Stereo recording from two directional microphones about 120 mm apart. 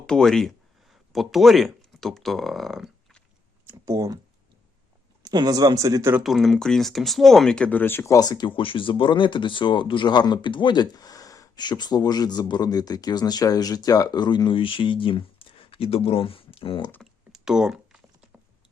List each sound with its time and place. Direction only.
0.0 s speech: 5° left (ahead or behind)
3.8 s speech: 30° right (ahead or behind)
5.2 s speech: 35° right (ahead or behind)
6.2 s speech: centre (ahead or behind); by 16.9 s 45° left (ahead or behind)
17.0 s typing: 5° right (ahead or behind)